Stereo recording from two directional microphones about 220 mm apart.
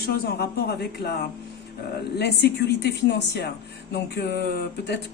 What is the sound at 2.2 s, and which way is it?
Speech, 50° left (ahead or behind).